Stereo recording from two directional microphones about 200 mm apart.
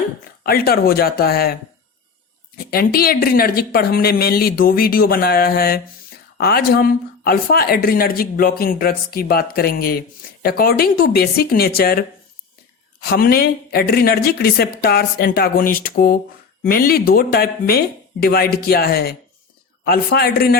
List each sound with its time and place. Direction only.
0.4 s speech: 50° left (ahead or behind)
2.6 s speech: 50° left (ahead or behind)